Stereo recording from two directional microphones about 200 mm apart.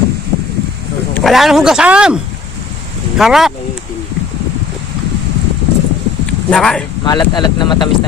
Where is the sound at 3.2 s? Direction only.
Centre (ahead or behind).